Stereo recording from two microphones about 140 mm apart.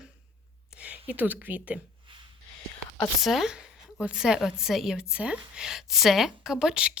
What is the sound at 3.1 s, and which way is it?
A woman's voice, centre (ahead or behind).